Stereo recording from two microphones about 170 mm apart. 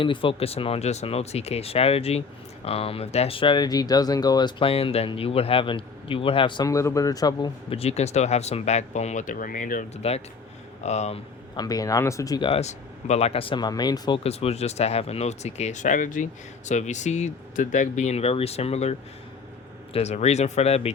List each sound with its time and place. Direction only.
0.0 s speech: 30° left (ahead or behind); by 9.8 s 55° left (ahead or behind)
10.0 s speech: 35° left (ahead or behind)
11.5 s speech: 20° left (ahead or behind)
14.3 s speech: 40° left (ahead or behind)